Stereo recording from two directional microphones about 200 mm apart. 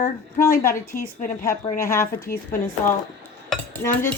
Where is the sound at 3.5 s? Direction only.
10° left (ahead or behind).